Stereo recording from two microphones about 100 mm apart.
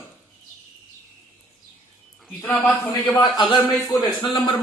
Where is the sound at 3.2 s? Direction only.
50° left (ahead or behind).